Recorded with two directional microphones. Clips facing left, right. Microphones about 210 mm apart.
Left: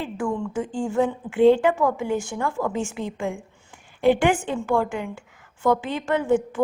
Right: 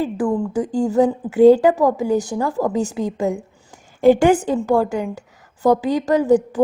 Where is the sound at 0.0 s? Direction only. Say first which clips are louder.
Right 7 dB; 35° right (ahead or behind).